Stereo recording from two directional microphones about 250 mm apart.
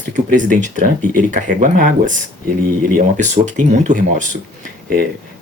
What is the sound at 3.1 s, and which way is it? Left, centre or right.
Speech, right.